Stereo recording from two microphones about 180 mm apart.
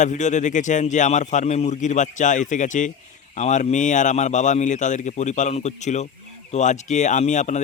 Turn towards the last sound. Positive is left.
turn(degrees=40)  # may be behind; listen again after turning